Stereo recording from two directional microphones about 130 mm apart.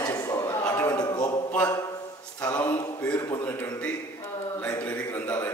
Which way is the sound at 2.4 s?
10° left (ahead or behind).